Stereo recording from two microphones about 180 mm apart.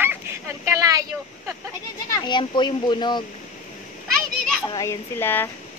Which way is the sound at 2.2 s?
25° left (ahead or behind).